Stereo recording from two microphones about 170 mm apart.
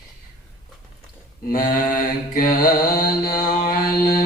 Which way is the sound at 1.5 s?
55° left (ahead or behind).